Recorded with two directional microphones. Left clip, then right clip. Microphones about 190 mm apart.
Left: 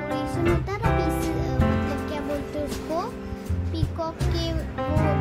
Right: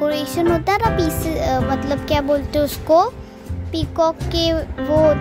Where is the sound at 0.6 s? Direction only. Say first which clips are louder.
Right 9 dB; 45° right (ahead or behind).